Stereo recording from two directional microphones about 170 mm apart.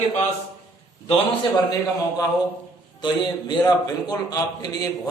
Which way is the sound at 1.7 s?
20° left (ahead or behind).